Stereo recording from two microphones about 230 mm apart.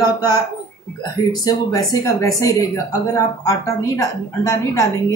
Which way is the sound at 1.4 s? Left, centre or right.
Centre.